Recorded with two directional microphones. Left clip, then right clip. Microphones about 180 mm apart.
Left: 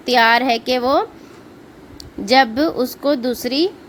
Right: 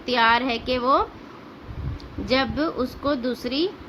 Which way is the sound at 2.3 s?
35° left (ahead or behind).